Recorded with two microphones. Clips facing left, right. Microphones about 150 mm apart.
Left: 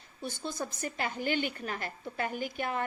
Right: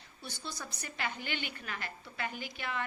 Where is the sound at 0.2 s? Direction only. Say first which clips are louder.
Left 8 dB; 45° left (ahead or behind).